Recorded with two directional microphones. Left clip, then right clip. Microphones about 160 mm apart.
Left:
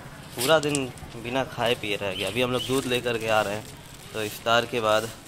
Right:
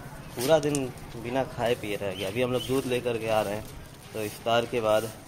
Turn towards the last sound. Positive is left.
turn(degrees=15)  # may be behind; listen again after turning